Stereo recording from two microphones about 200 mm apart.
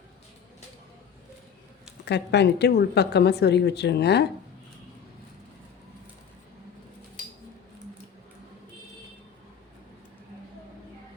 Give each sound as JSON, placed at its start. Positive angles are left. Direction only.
{"t": 2.0, "sound": "a woman's voice", "side_deg": 60}